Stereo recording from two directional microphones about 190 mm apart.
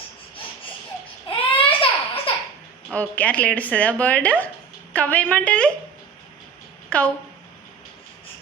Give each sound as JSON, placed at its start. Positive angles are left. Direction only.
{"t": 1.5, "sound": "a sound", "side_deg": 30}
{"t": 2.9, "sound": "speech", "side_deg": 10}
{"t": 6.9, "sound": "speech", "side_deg": 5}